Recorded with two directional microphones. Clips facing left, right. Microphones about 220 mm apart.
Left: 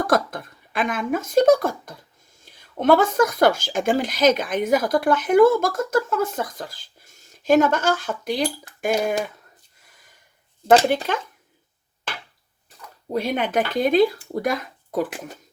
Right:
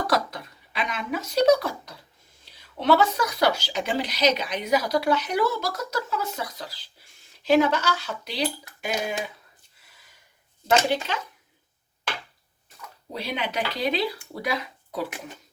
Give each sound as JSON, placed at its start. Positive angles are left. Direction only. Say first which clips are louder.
{"t": 0.0, "sound": "speech", "louder": "left 4 dB", "side_deg": 50}
{"t": 10.8, "sound": "speech", "louder": "left 4 dB", "side_deg": 50}
{"t": 13.1, "sound": "speech", "louder": "left 7 dB", "side_deg": 50}